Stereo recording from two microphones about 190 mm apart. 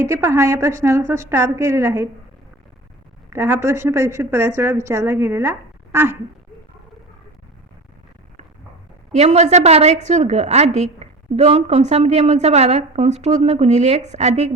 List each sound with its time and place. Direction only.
0.0 s a woman's voice: 15° right (ahead or behind)
3.2 s a woman's voice: 10° right (ahead or behind)
9.1 s a woman's voice: 35° right (ahead or behind)